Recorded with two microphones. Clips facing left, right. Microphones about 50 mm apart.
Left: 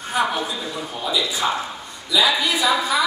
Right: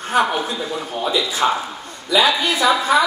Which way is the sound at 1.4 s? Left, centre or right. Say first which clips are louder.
Right 5 dB; right.